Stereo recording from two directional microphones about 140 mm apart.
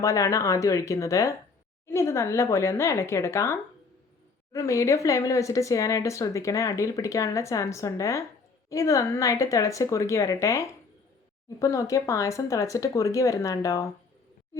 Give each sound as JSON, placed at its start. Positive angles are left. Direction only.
{"t": 0.0, "sound": "speech", "side_deg": 20}